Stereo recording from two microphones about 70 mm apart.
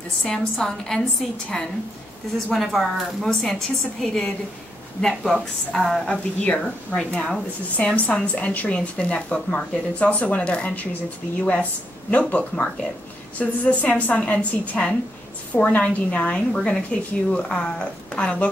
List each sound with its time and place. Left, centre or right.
0.2 s a woman's voice: centre
6.0 s speech: centre
12.1 s speech: left